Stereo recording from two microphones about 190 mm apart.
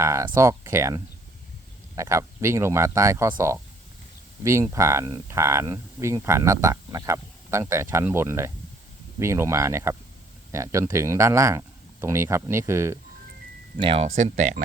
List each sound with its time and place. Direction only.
0.0 s speech: 15° right (ahead or behind)
13.7 s speech: 30° right (ahead or behind)